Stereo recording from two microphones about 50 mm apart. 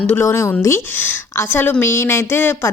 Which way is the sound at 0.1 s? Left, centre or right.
Left.